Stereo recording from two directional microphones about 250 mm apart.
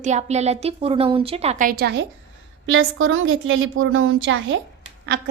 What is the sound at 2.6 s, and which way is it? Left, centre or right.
Speech, right.